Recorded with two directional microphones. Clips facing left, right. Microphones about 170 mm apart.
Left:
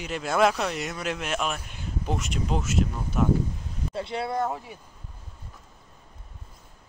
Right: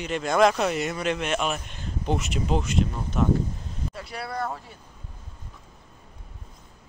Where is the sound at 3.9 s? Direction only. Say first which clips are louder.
Left 7 dB; 25° left (ahead or behind).